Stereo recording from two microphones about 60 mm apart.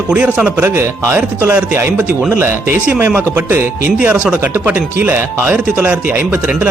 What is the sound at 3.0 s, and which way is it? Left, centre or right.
Speech, right.